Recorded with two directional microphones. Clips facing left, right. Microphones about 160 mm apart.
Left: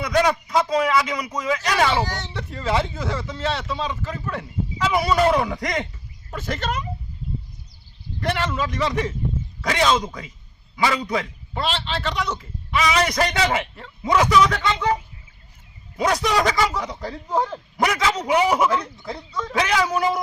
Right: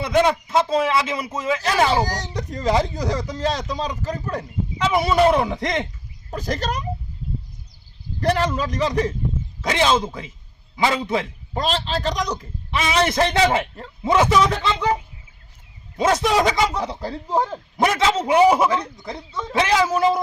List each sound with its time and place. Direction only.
0.0 s speech: 25° right (ahead or behind)
1.9 s a man's voice: 40° right (ahead or behind)
4.8 s speech: 20° right (ahead or behind)
6.3 s a man's voice: 35° right (ahead or behind)
8.2 s a man's voice: 35° right (ahead or behind)
9.6 s speech: 25° right (ahead or behind)
11.5 s a man's voice: 40° right (ahead or behind)
16.0 s speech: 20° right (ahead or behind)
16.8 s speech: 30° right (ahead or behind)